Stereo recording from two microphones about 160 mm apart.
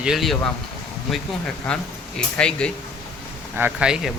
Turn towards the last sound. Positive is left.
turn(degrees=-5)  # may be behind; listen again after turning